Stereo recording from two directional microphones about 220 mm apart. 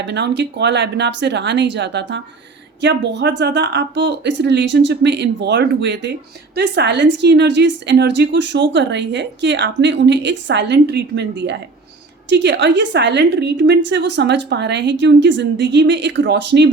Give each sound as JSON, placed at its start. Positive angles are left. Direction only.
{"t": 0.0, "sound": "a woman's voice", "side_deg": -50}